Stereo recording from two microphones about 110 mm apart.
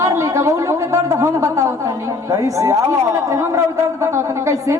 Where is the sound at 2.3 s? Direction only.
30° right (ahead or behind).